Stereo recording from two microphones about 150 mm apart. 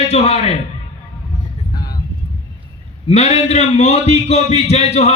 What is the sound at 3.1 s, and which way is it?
A man's voice, 45° left (ahead or behind).